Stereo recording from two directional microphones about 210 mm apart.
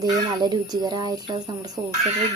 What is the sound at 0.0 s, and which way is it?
Speech, 20° right (ahead or behind).